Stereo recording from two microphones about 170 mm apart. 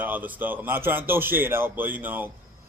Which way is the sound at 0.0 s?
10° right (ahead or behind).